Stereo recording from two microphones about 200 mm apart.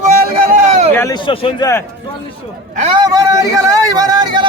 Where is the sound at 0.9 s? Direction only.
15° left (ahead or behind).